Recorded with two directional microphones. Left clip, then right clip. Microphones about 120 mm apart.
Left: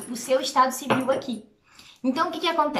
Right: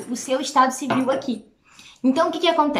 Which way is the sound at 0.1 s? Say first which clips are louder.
Right 1 dB; 20° right (ahead or behind).